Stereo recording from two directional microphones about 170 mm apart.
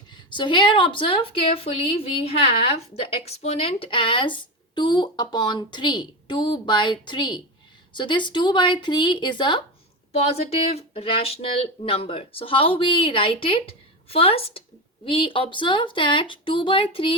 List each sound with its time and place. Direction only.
0.1 s speech: 30° left (ahead or behind)